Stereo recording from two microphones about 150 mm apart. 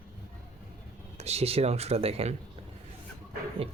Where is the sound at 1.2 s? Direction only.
45° right (ahead or behind).